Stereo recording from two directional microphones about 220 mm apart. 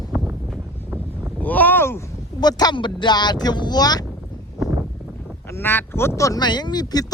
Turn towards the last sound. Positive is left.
turn(degrees=15)  # may be behind; listen again after turning